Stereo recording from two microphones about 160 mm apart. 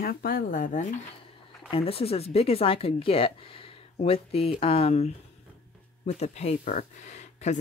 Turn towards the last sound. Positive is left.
turn(degrees=45)  # may be behind; listen again after turning